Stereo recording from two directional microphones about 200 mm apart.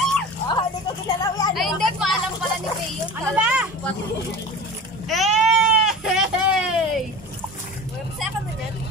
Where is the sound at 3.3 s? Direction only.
5° right (ahead or behind).